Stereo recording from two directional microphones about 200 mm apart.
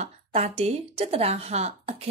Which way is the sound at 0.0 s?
30° right (ahead or behind).